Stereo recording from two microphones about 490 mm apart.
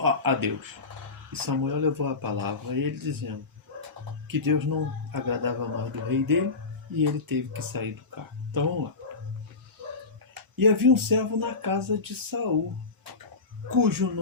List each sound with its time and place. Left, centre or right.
0.0 s speech: right
10.3 s speech: right
13.7 s speech: right